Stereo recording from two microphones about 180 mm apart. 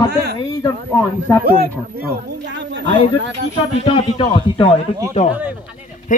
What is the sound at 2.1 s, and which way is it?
Speech, 80° right.